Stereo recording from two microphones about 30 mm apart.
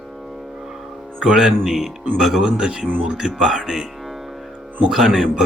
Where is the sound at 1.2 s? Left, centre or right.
Right.